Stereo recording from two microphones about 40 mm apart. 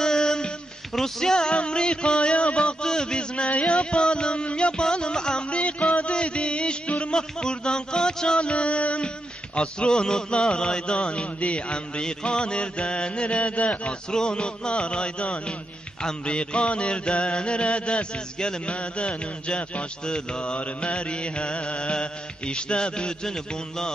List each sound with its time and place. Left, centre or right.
0.0 s a sound: centre
0.9 s music: centre
5.6 s music: left
7.2 s music: left
8.4 s music: left
14.1 s music: left